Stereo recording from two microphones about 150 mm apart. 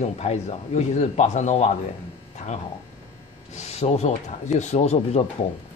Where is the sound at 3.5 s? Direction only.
50° left (ahead or behind).